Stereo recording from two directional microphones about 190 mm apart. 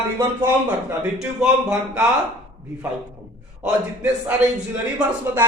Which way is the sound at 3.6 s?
5° right (ahead or behind).